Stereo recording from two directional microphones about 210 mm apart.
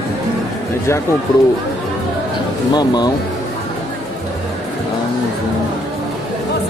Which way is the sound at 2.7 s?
20° left (ahead or behind).